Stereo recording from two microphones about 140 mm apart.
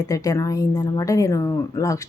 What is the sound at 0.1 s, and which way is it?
Speech, 25° left (ahead or behind).